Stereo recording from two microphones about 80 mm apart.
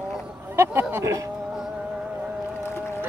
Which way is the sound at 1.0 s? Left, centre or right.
Right.